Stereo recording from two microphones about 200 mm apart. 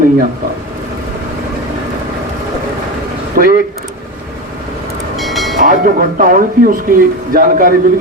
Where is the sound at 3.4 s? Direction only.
45° right (ahead or behind).